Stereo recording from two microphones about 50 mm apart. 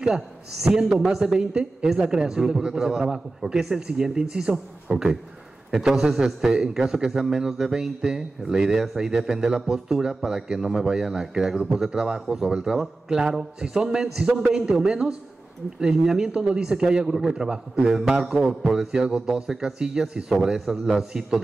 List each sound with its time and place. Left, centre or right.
0.0 s a man's voice: centre
5.8 s a man's voice: centre
16.3 s a man's voice: centre